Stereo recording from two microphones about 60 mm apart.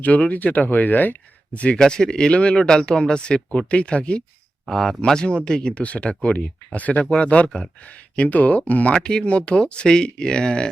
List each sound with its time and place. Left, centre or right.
0.0 s speech: left
4.7 s speech: centre